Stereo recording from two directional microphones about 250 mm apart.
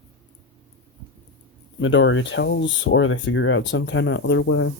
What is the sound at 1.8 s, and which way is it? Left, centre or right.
Speech, left.